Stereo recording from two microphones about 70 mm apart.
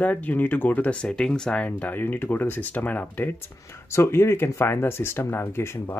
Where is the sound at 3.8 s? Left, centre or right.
Left.